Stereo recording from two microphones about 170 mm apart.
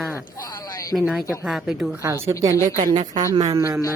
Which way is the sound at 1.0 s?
Centre (ahead or behind).